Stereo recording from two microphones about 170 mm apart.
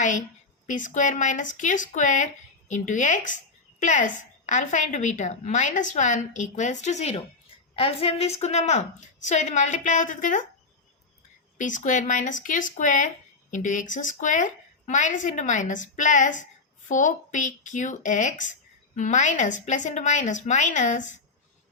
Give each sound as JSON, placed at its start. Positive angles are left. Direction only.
{"t": 0.0, "sound": "a woman's voice", "side_deg": 45}
{"t": 11.5, "sound": "a woman's voice", "side_deg": 50}